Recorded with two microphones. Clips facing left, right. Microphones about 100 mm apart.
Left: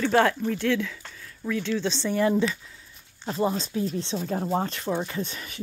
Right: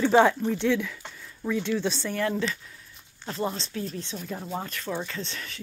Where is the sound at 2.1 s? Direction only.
10° left (ahead or behind).